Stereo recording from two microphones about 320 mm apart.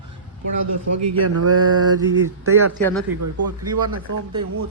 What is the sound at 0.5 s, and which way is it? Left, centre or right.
Speech, right.